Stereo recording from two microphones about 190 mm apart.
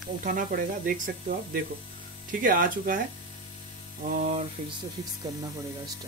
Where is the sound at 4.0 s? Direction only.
40° right (ahead or behind).